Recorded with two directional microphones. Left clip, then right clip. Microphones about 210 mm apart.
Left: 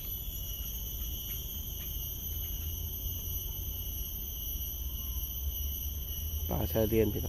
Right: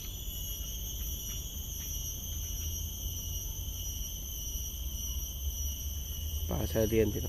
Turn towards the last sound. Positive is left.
turn(degrees=10)  # may be behind; listen again after turning